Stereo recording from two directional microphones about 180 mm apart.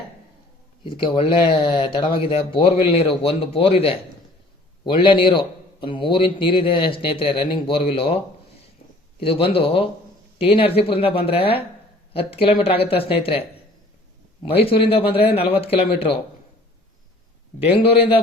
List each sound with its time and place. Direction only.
0.9 s a man's voice: 30° left (ahead or behind)
9.2 s speech: 30° left (ahead or behind)
14.4 s speech: 30° left (ahead or behind)